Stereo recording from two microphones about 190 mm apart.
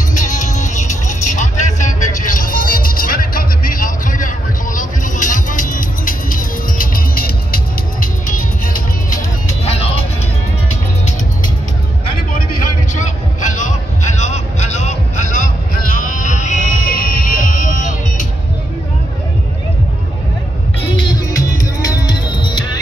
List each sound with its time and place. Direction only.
0.1 s music: 40° left (ahead or behind)
13.5 s vehicle: 40° left (ahead or behind)
15.9 s music: 40° left (ahead or behind)
20.9 s music: 25° left (ahead or behind)